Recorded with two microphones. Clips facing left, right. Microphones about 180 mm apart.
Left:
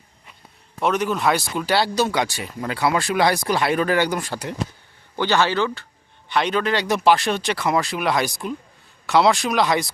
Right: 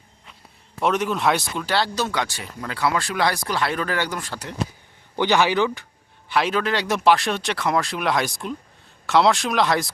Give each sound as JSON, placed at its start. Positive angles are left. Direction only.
{"t": 0.8, "sound": "speech", "side_deg": 0}
{"t": 5.1, "sound": "speech", "side_deg": -15}
{"t": 6.2, "sound": "speech", "side_deg": -5}